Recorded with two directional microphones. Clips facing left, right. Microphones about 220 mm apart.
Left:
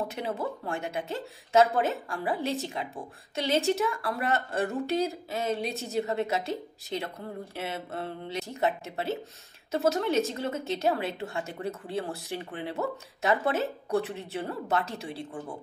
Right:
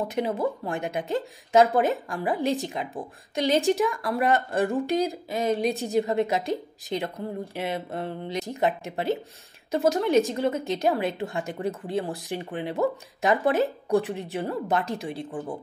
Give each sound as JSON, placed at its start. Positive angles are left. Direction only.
{"t": 0.1, "sound": "a woman's voice", "side_deg": -15}